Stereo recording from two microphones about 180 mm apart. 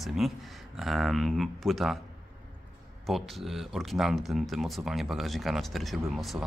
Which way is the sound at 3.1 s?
Centre (ahead or behind).